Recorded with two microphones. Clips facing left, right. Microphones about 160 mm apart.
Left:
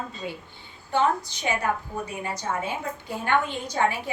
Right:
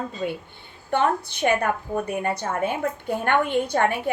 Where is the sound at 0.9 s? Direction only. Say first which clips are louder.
Right 1 dB; 60° right (ahead or behind).